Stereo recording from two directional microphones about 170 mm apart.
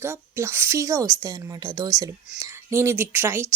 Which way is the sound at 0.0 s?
15° right (ahead or behind).